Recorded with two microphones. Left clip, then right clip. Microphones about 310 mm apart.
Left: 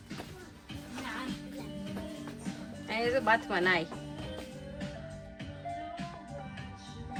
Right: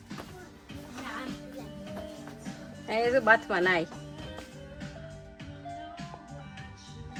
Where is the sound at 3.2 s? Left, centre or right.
Right.